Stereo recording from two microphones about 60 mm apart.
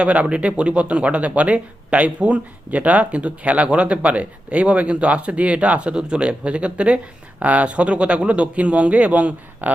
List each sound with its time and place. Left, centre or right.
0.0 s speech: right